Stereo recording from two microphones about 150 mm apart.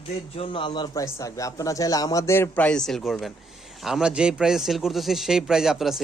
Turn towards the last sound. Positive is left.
turn(degrees=0)  # may be behind; listen again after turning